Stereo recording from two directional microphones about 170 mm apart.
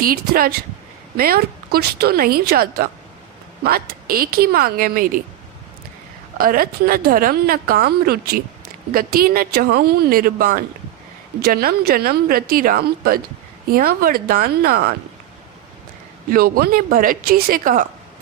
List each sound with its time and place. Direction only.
0.0 s a woman's voice: 60° right (ahead or behind)
6.3 s a woman's voice: 55° right (ahead or behind)
16.3 s a woman's voice: 60° right (ahead or behind)